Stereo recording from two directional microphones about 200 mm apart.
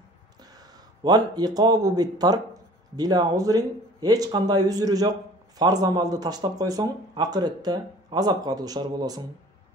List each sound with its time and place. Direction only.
0.6 s speech: 20° right (ahead or behind)